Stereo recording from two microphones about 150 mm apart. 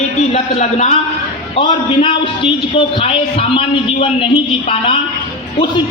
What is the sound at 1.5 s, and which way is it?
A man's voice, 35° left (ahead or behind).